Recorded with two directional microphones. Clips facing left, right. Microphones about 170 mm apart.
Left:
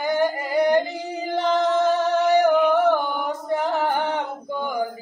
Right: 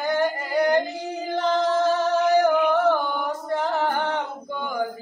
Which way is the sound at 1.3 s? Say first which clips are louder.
Left 1 dB; 15° left (ahead or behind).